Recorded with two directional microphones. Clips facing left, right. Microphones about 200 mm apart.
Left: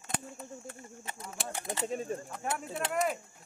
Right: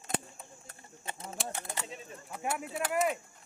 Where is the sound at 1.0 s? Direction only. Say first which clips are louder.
Right 4 dB; 25° right (ahead or behind).